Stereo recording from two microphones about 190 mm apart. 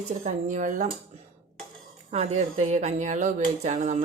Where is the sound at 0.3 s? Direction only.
40° right (ahead or behind).